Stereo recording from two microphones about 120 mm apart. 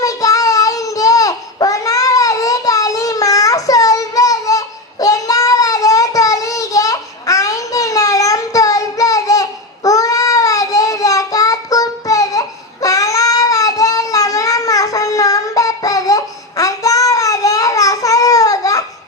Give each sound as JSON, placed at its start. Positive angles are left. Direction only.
{"t": 0.0, "sound": "child singing", "side_deg": 30}